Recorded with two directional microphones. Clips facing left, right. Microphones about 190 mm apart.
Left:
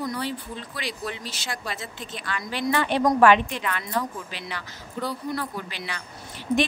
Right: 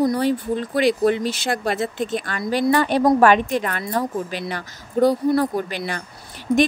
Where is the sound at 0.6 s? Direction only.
55° right (ahead or behind).